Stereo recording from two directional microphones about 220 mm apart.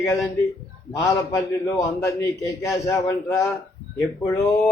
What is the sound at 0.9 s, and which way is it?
A man's voice, 15° left (ahead or behind).